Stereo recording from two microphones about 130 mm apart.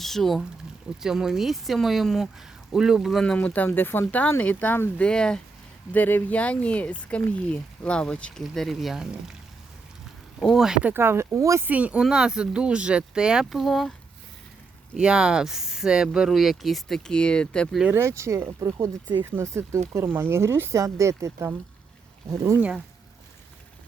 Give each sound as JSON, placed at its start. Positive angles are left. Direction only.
{"t": 0.0, "sound": "speech", "side_deg": 0}
{"t": 10.4, "sound": "speech", "side_deg": 0}
{"t": 10.9, "sound": "speech", "side_deg": -20}
{"t": 11.7, "sound": "speech", "side_deg": -10}
{"t": 14.9, "sound": "speech", "side_deg": -5}
{"t": 17.9, "sound": "speech", "side_deg": -20}